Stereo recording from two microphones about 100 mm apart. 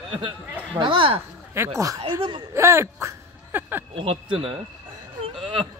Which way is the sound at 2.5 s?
30° right (ahead or behind).